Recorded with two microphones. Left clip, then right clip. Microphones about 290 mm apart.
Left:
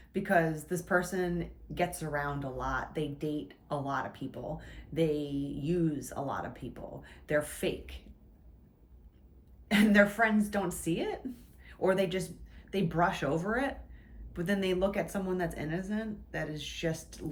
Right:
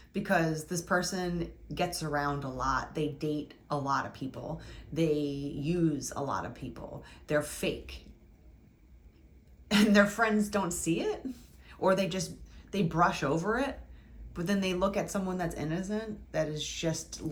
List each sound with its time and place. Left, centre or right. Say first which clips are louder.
0.1 s speech: left 1 dB; centre
9.6 s speech: even; centre